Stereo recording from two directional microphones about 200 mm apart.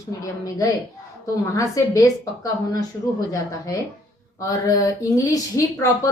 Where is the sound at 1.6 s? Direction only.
15° left (ahead or behind).